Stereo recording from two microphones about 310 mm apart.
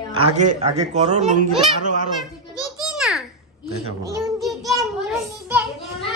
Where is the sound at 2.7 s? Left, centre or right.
Centre.